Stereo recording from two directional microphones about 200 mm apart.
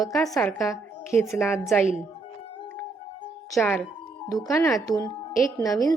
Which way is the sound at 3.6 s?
5° left (ahead or behind).